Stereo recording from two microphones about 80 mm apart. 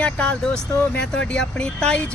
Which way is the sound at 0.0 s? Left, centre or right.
Centre.